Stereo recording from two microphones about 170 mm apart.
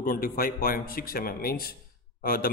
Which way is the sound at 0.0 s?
55° left (ahead or behind).